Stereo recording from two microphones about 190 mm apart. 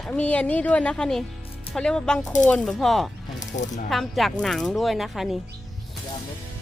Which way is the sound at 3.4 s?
40° left (ahead or behind).